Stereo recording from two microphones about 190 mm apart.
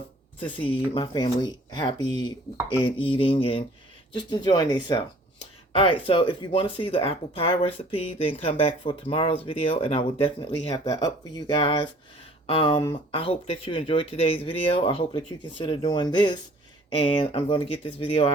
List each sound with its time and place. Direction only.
0.3 s speech: 25° left (ahead or behind)